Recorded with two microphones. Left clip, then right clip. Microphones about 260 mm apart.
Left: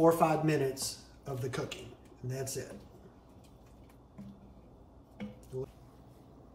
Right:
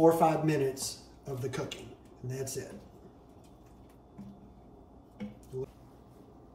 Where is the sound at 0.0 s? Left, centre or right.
Centre.